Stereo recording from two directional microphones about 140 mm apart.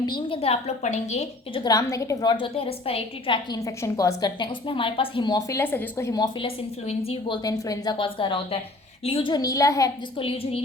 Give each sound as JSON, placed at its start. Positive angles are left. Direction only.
{"t": 0.0, "sound": "a woman's voice", "side_deg": 35}
{"t": 1.5, "sound": "a woman's voice", "side_deg": 25}
{"t": 2.3, "sound": "a woman's voice", "side_deg": 40}
{"t": 6.1, "sound": "a woman's voice", "side_deg": 30}
{"t": 6.8, "sound": "a woman's voice", "side_deg": 45}
{"t": 7.4, "sound": "a woman's voice", "side_deg": 30}
{"t": 10.2, "sound": "a woman's voice", "side_deg": 40}